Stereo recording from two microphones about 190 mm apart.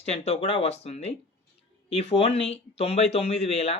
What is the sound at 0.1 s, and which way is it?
Speech, 35° left (ahead or behind).